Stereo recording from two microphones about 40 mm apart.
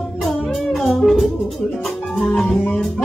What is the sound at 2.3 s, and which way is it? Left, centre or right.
Music, centre.